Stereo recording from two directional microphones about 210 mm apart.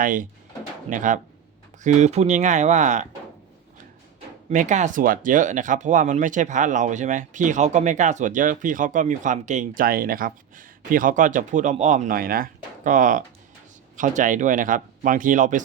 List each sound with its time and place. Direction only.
0.0 s speech: 40° right (ahead or behind)
4.4 s speech: 35° right (ahead or behind)